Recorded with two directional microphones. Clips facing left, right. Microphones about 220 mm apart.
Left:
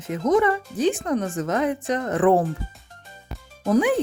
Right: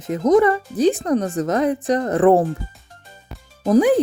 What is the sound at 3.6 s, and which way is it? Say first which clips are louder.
Speech: right 5 dB; 35° right (ahead or behind).